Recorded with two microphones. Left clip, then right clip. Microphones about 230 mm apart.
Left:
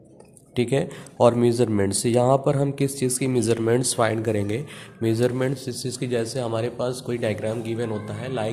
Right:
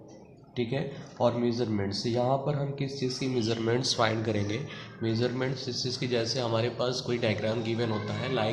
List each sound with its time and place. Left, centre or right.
0.5 s speech: left